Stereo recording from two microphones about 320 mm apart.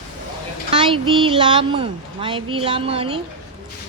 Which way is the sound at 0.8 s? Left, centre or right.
Centre.